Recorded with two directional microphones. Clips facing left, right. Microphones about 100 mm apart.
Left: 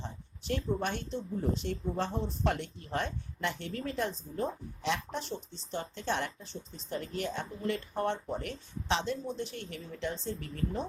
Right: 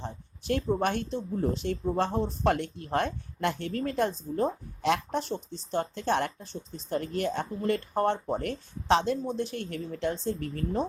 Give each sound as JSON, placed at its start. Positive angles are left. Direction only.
{"t": 0.0, "sound": "speech", "side_deg": -55}